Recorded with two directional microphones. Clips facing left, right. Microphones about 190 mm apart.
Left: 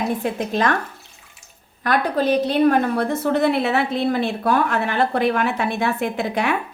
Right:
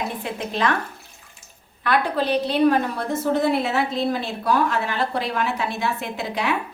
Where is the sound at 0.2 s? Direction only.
45° left (ahead or behind).